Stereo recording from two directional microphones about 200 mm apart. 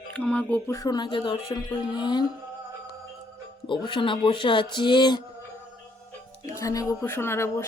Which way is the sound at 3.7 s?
25° left (ahead or behind).